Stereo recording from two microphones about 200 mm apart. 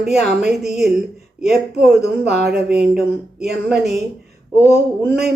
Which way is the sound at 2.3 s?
50° right (ahead or behind).